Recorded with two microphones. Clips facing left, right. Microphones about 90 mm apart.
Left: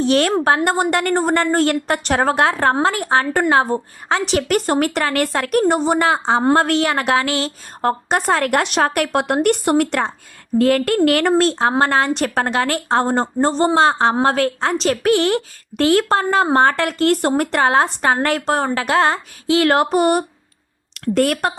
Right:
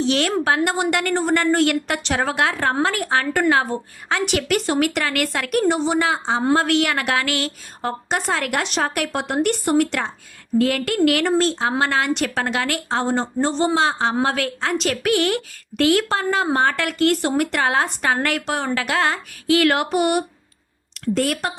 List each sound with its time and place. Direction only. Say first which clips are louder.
0.0 s a woman's voice: left 4 dB; 40° left (ahead or behind)
2.7 s a woman's voice: left 3 dB; 25° left (ahead or behind)
7.8 s speech: left 6 dB; 50° left (ahead or behind)
11.7 s a woman's voice: left 4 dB; 35° left (ahead or behind)
21.0 s speech: left 4 dB; 50° left (ahead or behind)